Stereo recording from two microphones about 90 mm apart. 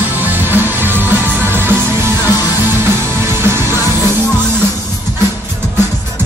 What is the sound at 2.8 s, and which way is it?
Music, 25° right (ahead or behind).